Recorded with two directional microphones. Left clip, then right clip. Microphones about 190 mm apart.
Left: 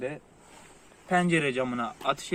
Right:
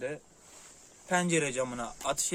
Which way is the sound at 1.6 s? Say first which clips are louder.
Left 5 dB; 40° right (ahead or behind).